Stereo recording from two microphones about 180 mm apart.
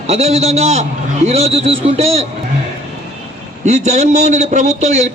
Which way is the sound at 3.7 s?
40° right (ahead or behind).